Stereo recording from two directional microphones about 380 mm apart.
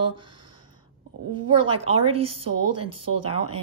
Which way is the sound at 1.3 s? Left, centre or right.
Centre.